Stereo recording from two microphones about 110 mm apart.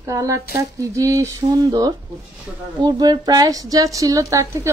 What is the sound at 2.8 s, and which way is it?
A woman's voice, 40° right (ahead or behind).